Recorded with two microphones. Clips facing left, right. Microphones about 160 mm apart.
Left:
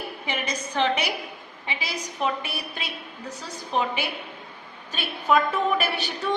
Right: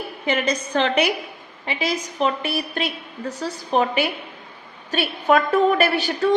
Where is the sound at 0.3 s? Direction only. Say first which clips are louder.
Right 9 dB; 65° right (ahead or behind).